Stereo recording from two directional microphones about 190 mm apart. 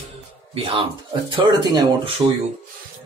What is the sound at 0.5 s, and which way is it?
Speech, 30° right (ahead or behind).